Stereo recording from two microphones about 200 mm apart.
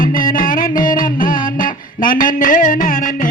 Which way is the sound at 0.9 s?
45° left (ahead or behind).